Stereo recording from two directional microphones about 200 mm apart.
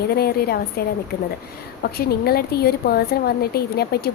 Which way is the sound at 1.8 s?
50° left (ahead or behind).